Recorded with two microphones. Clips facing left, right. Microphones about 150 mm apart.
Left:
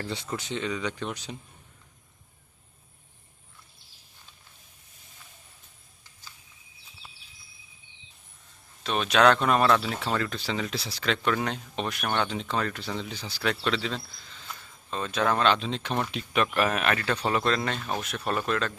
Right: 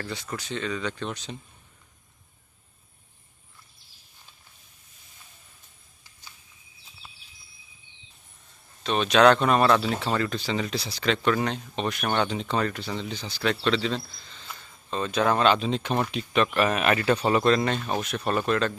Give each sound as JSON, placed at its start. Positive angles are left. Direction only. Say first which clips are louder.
{"t": 0.0, "sound": "speech", "louder": "left 1 dB", "side_deg": 20}
{"t": 8.8, "sound": "speech", "louder": "right 3 dB", "side_deg": 5}